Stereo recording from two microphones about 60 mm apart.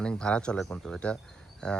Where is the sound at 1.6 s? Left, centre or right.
Centre.